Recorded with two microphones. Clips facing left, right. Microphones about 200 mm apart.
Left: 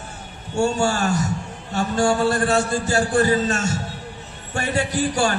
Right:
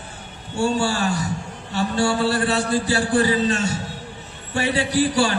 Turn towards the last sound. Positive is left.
turn(degrees=45)  # may be behind; listen again after turning